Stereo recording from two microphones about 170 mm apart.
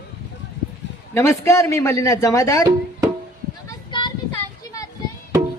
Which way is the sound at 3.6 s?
25° left (ahead or behind).